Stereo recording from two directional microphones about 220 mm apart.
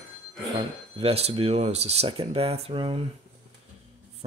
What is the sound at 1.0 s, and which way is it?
Speech, 25° right (ahead or behind).